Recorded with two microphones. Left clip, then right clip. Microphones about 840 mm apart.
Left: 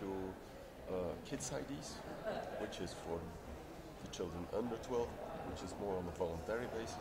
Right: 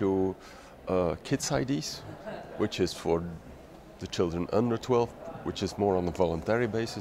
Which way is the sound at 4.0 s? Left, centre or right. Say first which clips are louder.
Right 15 dB; right.